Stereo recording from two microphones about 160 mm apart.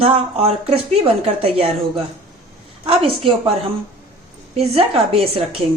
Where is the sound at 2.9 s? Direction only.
35° right (ahead or behind).